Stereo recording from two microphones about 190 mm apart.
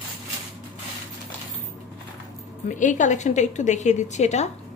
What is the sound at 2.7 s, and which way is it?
A woman's voice, 40° left (ahead or behind).